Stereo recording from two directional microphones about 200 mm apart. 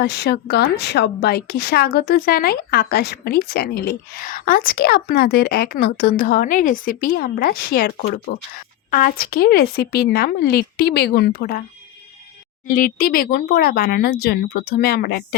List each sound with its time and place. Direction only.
0.0 s speech: 55° left (ahead or behind)
12.7 s speech: 45° left (ahead or behind)